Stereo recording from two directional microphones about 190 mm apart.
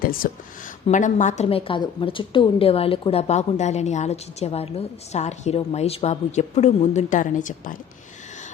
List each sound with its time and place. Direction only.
0.0 s a woman's voice: 50° left (ahead or behind)